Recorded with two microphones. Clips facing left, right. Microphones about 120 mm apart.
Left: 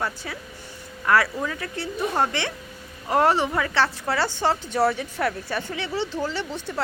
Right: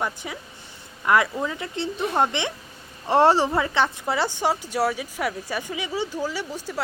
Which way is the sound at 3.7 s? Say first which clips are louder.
Even; 15° right (ahead or behind).